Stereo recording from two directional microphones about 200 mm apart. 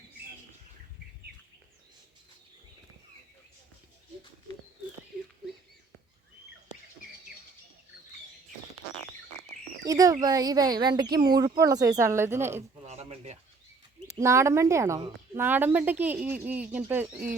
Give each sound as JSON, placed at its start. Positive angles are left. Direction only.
{"t": 9.8, "sound": "a woman's voice", "side_deg": -15}
{"t": 12.8, "sound": "a sound", "side_deg": -30}
{"t": 14.2, "sound": "a woman's voice", "side_deg": -15}